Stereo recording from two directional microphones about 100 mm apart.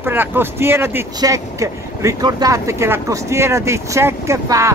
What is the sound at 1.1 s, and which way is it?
Speech, 35° right (ahead or behind).